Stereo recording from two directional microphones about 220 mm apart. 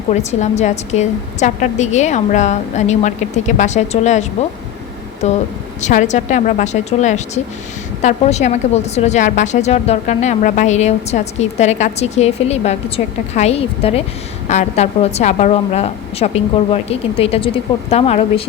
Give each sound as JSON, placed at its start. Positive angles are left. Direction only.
{"t": 0.3, "sound": "a woman's voice", "side_deg": 30}